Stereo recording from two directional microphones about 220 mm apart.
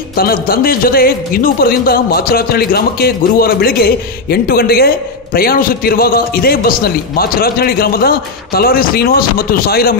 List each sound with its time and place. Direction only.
0.1 s a man's voice: 40° left (ahead or behind)